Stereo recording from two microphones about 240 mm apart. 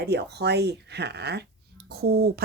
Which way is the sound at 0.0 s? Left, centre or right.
Right.